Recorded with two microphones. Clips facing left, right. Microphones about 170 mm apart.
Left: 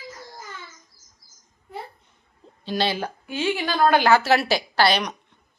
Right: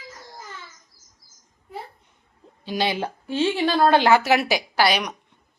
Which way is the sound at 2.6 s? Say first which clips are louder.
Even; 15° right (ahead or behind).